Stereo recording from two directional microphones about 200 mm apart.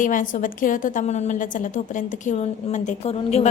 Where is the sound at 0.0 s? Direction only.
40° left (ahead or behind).